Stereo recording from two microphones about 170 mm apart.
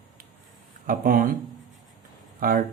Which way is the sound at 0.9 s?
55° right (ahead or behind).